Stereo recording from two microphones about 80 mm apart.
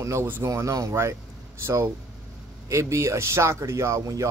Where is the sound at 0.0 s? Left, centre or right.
Right.